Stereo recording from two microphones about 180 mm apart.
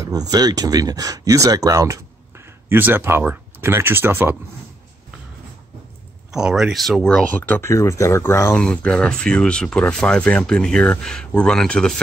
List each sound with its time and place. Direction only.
0.3 s speech: 20° right (ahead or behind)
6.3 s speech: 5° right (ahead or behind)